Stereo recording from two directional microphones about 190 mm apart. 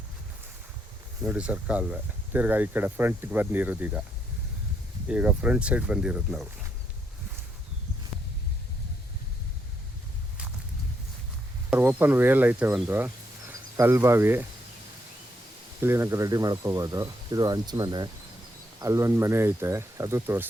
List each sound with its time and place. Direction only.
1.2 s speech: 5° right (ahead or behind)
5.0 s speech: 5° right (ahead or behind)
11.7 s speech: 10° right (ahead or behind)
15.8 s speech: 15° right (ahead or behind)